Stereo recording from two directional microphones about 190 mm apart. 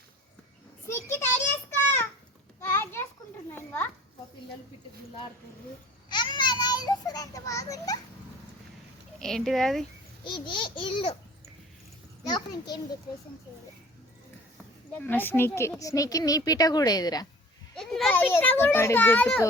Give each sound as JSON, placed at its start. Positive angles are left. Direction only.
{"t": 0.9, "sound": "a sound", "side_deg": 15}
{"t": 2.6, "sound": "a sound", "side_deg": 10}
{"t": 3.5, "sound": "children playing", "side_deg": 10}
{"t": 6.1, "sound": "a child's voice", "side_deg": 25}
{"t": 9.1, "sound": "speech", "side_deg": 0}
{"t": 10.2, "sound": "a woman's voice", "side_deg": 25}
{"t": 12.2, "sound": "a woman's voice", "side_deg": 20}
{"t": 15.0, "sound": "a child's voice", "side_deg": 10}
{"t": 17.7, "sound": "a child's voice", "side_deg": 0}